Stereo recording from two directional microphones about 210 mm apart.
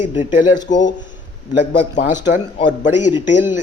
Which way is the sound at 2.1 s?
35° left (ahead or behind).